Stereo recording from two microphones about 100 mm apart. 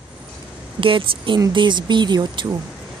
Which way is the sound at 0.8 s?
60° right (ahead or behind).